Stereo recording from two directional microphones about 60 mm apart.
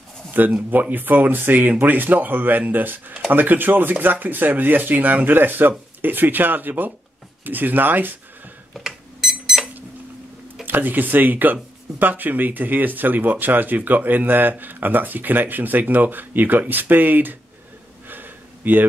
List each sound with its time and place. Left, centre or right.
0.3 s speech: right
8.7 s alarm: centre
10.6 s speech: right
18.0 s a sound: right